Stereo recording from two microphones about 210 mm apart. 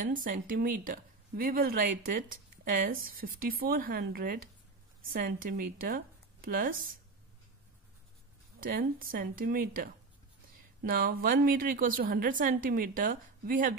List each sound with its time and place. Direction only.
0.0 s speech: 40° right (ahead or behind)
8.5 s a woman's voice: 45° right (ahead or behind)